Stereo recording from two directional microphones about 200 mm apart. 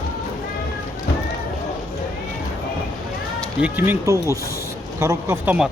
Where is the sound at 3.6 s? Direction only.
10° right (ahead or behind).